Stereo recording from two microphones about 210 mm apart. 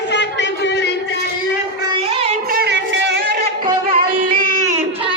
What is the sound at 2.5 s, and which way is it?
Music, 50° right (ahead or behind).